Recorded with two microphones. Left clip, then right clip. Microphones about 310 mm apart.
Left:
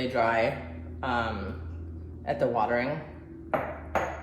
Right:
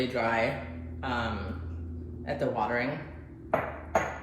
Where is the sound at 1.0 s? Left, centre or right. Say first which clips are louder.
Left 3 dB; centre.